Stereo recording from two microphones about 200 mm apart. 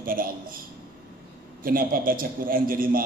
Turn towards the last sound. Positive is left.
turn(degrees=-45)  # may be behind; listen again after turning